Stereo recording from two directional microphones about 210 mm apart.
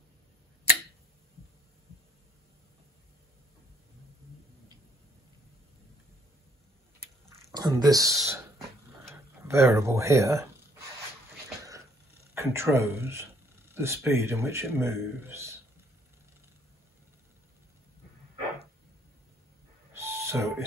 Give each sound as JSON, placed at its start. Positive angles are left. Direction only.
{"t": 7.5, "sound": "speech", "side_deg": -20}
{"t": 12.4, "sound": "speech", "side_deg": -10}
{"t": 19.9, "sound": "owl", "side_deg": -15}